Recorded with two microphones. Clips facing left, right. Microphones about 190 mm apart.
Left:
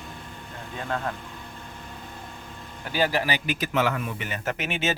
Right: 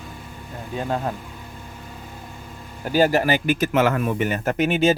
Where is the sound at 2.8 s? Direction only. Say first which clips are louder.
Right 7 dB; 45° right (ahead or behind).